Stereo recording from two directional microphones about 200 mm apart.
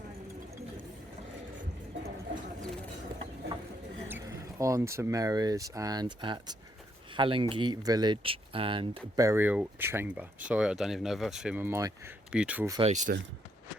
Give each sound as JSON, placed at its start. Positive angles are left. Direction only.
{"t": 4.1, "sound": "speech", "side_deg": -15}
{"t": 12.8, "sound": "speech", "side_deg": -35}